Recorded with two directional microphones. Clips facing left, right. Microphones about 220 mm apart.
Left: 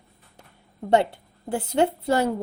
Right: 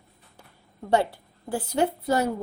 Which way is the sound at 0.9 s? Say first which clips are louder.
Left 3 dB; 25° left (ahead or behind).